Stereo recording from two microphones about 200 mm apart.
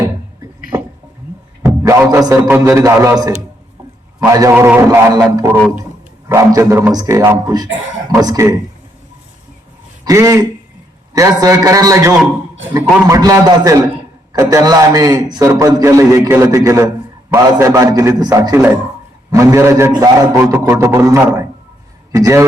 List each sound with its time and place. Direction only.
1.8 s a man's voice: 15° right (ahead or behind)
10.0 s a man's voice: 15° right (ahead or behind)